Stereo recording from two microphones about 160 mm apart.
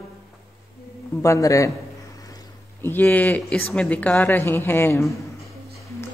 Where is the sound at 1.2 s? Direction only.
20° left (ahead or behind).